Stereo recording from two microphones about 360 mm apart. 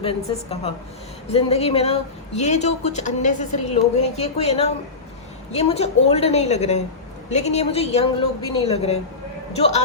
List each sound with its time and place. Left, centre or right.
0.0 s speech: centre